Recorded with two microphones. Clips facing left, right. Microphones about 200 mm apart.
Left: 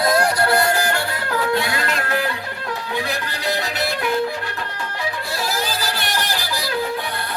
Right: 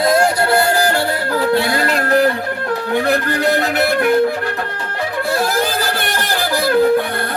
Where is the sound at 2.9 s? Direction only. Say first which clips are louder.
Right 11 dB; 55° right (ahead or behind).